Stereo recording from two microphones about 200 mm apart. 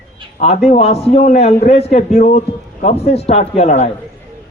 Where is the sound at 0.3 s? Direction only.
30° left (ahead or behind).